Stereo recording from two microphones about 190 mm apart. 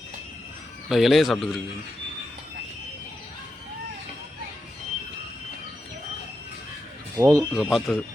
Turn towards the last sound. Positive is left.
turn(degrees=0)  # may be behind; listen again after turning